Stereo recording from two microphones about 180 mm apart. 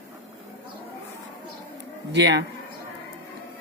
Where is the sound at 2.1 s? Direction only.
80° right.